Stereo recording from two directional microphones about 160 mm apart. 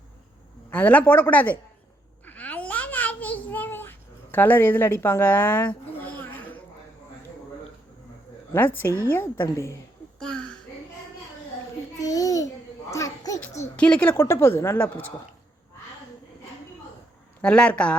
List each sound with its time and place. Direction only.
0.7 s a woman's voice: 10° left (ahead or behind)
2.2 s babbling: 10° left (ahead or behind)
8.5 s a woman's voice: 15° left (ahead or behind)
10.2 s a sound: 5° left (ahead or behind)
11.9 s babbling: 20° left (ahead or behind)
12.9 s a sound: 20° left (ahead or behind)
13.7 s a woman's voice: 5° left (ahead or behind)
17.4 s a woman's voice: 10° left (ahead or behind)